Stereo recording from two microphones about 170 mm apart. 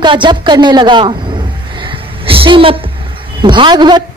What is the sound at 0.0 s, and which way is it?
A woman's voice, 25° right (ahead or behind).